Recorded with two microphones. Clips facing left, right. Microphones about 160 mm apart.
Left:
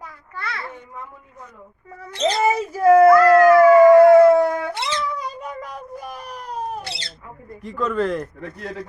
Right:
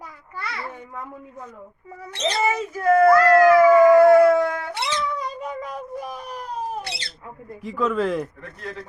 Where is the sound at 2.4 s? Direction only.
35° left (ahead or behind).